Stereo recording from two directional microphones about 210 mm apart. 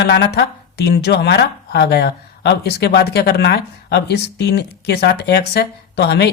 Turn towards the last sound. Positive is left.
turn(degrees=50)  # may be behind; listen again after turning